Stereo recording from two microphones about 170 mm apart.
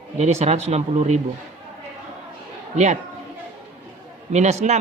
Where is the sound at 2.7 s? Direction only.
45° right (ahead or behind).